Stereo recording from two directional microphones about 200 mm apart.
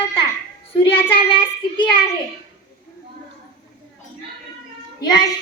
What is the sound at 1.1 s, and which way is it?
Child singing, 25° left (ahead or behind).